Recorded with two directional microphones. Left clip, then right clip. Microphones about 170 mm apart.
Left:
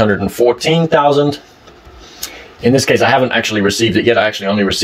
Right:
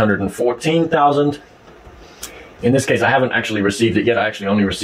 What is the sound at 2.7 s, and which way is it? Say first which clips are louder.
Speech: left 4 dB; 30° left (ahead or behind).